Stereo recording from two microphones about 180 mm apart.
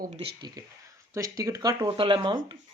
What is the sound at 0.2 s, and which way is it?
Speech, 25° right (ahead or behind).